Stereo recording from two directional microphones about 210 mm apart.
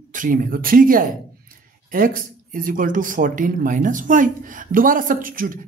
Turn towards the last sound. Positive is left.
turn(degrees=-40)  # may be behind; listen again after turning